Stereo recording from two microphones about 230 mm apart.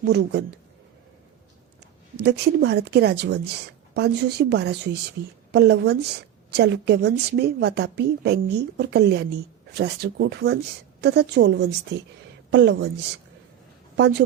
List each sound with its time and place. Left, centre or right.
0.0 s speech: right
2.2 s speech: right
13.9 s a woman's voice: right